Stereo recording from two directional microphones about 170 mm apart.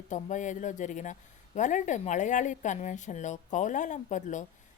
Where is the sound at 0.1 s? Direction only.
45° left (ahead or behind).